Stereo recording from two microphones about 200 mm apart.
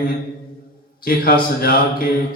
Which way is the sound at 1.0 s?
45° left (ahead or behind).